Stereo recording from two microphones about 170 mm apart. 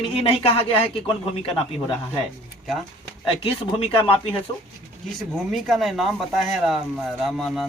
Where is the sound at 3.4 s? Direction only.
35° left (ahead or behind).